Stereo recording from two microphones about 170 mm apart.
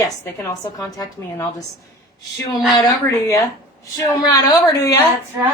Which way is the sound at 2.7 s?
25° left (ahead or behind).